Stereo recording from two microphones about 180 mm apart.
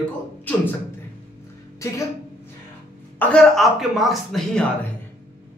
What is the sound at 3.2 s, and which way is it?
Speech, 5° left (ahead or behind).